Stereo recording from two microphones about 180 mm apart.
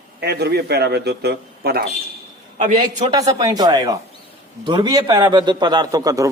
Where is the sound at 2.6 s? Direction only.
45° right (ahead or behind).